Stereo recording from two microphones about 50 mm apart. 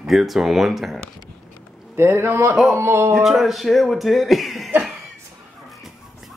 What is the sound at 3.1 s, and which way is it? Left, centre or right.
Speech, centre.